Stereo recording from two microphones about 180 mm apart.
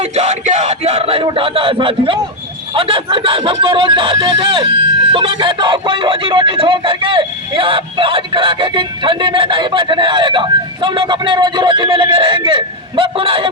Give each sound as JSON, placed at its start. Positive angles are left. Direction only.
{"t": 0.0, "sound": "speech", "side_deg": -40}